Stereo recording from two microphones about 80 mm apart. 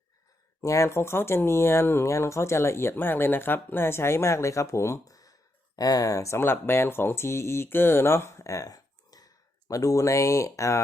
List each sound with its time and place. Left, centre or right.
0.6 s speech: left